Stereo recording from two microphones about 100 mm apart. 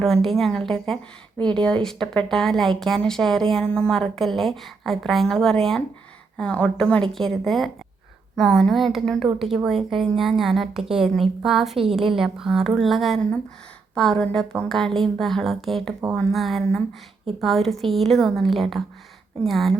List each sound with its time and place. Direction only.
0.0 s a woman's voice: 5° left (ahead or behind)